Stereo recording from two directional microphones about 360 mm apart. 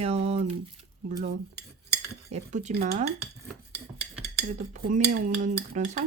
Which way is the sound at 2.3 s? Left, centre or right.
Centre.